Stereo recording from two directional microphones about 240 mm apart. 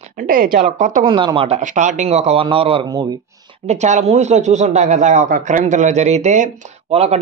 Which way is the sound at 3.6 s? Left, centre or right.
Right.